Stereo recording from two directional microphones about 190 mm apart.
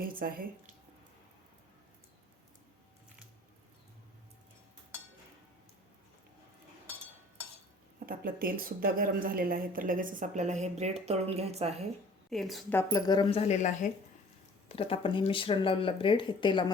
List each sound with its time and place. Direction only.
0.0 s speech: 50° right (ahead or behind)
7.9 s speech: 50° right (ahead or behind); by 11.7 s 35° right (ahead or behind)
12.3 s a woman's voice: centre (ahead or behind)
12.7 s speech: 20° left (ahead or behind)
13.4 s speech: 40° left (ahead or behind)